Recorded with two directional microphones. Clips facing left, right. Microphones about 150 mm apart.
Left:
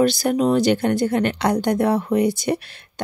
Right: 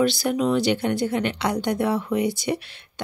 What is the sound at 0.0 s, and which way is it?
Speech, 45° left (ahead or behind).